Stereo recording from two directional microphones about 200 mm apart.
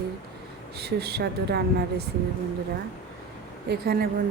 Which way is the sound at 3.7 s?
50° right (ahead or behind).